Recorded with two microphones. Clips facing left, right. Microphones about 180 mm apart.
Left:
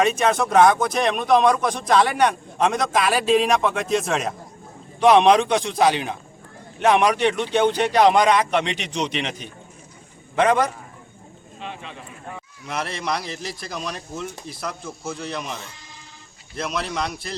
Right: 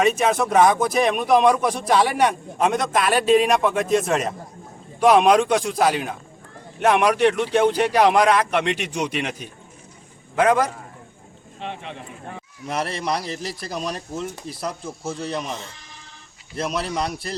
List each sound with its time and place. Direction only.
0.0 s speech: 5° right (ahead or behind)
12.6 s a man's voice: 35° right (ahead or behind)
16.6 s a man's voice: 35° right (ahead or behind)